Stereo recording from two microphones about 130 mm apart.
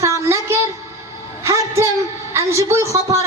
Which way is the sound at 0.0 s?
20° right (ahead or behind).